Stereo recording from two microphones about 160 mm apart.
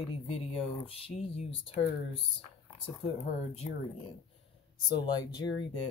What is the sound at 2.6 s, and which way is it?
Speech, 40° left (ahead or behind).